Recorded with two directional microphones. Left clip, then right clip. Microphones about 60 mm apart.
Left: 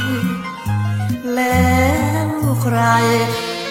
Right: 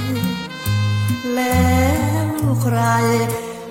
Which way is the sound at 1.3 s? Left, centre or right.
Right.